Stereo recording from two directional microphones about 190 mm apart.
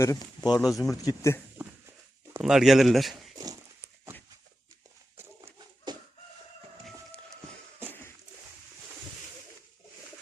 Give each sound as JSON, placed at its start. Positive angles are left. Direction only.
{"t": 0.0, "sound": "speech", "side_deg": 20}
{"t": 0.6, "sound": "speech", "side_deg": 0}
{"t": 0.9, "sound": "a man's voice", "side_deg": 15}
{"t": 2.4, "sound": "speech", "side_deg": 0}
{"t": 3.3, "sound": "a sound", "side_deg": -20}